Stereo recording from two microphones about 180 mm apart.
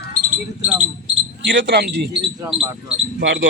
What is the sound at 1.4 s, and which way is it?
Speech, 85° right.